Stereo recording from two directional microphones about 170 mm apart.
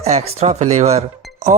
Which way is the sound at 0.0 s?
40° right (ahead or behind).